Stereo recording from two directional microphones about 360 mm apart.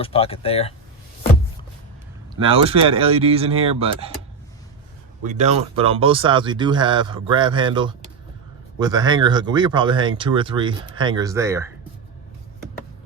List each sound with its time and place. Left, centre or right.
0.0 s speech: centre
2.3 s speech: centre
5.2 s speech: centre